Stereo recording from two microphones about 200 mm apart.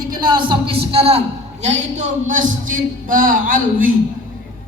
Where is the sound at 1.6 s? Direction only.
35° right (ahead or behind).